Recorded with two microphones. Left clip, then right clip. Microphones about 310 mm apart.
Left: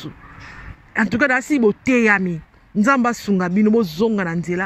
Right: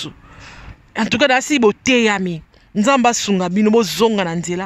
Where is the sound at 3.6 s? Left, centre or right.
Right.